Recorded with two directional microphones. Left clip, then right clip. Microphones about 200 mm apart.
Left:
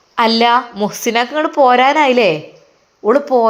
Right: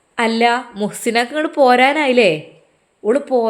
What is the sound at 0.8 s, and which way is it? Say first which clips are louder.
A woman's voice: left 2 dB; 10° right (ahead or behind).